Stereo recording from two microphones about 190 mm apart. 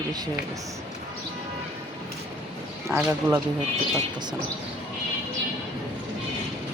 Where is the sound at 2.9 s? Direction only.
10° right (ahead or behind).